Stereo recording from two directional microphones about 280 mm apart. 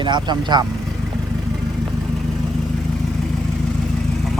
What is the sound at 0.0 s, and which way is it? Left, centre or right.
Speech, centre.